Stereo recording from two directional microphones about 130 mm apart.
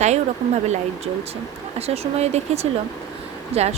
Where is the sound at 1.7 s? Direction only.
50° right (ahead or behind).